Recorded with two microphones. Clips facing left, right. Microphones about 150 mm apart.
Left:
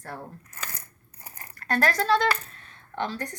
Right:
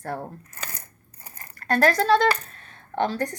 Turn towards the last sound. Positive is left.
turn(degrees=-45)  # may be behind; listen again after turning